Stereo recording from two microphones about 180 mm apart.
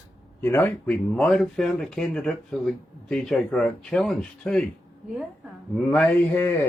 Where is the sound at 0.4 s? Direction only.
10° left (ahead or behind).